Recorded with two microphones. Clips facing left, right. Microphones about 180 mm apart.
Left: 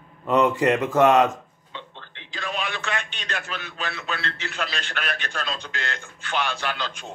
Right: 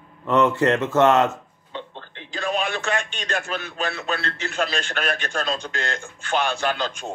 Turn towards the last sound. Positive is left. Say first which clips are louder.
# right 5 dB
turn(degrees=-45)  # may be behind; listen again after turning